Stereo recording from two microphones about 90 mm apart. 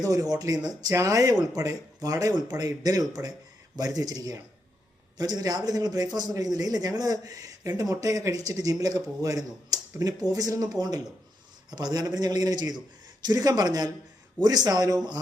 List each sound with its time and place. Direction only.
0.0 s a man's voice: 40° right (ahead or behind)
3.2 s speech: 30° right (ahead or behind)
3.8 s a man's voice: 45° right (ahead or behind)